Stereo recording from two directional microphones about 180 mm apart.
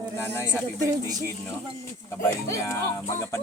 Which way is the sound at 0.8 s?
20° right (ahead or behind).